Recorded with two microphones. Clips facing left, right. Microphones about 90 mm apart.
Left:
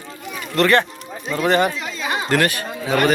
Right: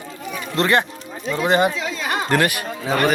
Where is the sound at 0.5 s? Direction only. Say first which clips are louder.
Left 2 dB; 20° right (ahead or behind).